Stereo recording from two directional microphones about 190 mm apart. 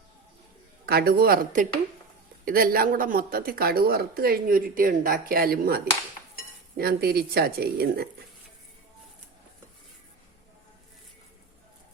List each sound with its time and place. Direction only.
0.9 s speech: 55° right (ahead or behind)